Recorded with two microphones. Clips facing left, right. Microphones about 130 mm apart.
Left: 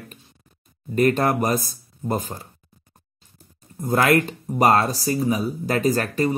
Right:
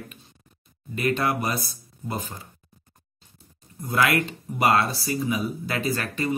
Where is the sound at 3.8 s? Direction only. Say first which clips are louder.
Left 5 dB; 40° left (ahead or behind).